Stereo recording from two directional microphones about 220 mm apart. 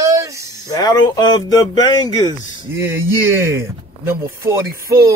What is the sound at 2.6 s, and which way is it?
Speech, 10° right (ahead or behind).